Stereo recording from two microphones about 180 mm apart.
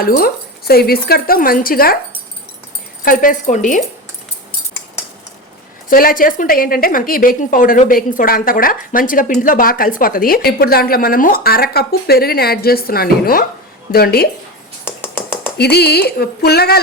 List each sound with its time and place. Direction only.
0.7 s a woman's voice: 60° left (ahead or behind)
3.0 s a woman's voice: 50° left (ahead or behind)
5.9 s a woman's voice: 50° left (ahead or behind)
14.8 s a sound: 10° left (ahead or behind)
15.5 s a woman's voice: 65° left (ahead or behind)